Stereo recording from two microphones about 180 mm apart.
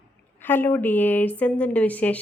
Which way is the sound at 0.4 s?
10° left (ahead or behind).